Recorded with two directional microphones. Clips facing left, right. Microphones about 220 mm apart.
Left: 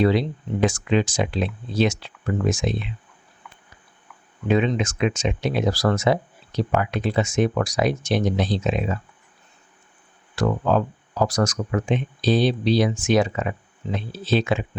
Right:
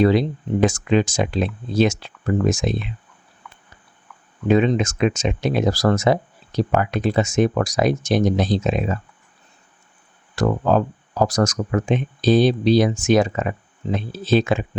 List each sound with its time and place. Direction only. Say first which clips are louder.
0.0 s speech: right 3 dB; 45° right (ahead or behind)
4.4 s speech: right 4 dB; 40° right (ahead or behind)
10.3 s speech: right 2 dB; 40° right (ahead or behind)